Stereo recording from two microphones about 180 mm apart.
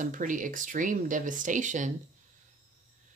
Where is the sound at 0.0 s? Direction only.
45° right (ahead or behind).